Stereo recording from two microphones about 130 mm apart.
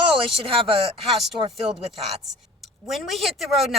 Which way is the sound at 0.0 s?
45° right (ahead or behind).